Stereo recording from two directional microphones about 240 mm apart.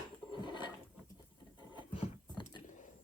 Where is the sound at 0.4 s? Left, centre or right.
Centre.